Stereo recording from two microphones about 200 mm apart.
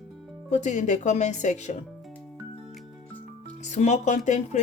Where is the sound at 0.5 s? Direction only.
35° left (ahead or behind).